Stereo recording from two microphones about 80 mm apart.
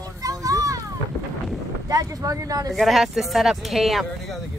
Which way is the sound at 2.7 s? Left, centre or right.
Centre.